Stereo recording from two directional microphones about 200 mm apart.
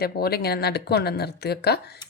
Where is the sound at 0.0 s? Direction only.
50° left (ahead or behind).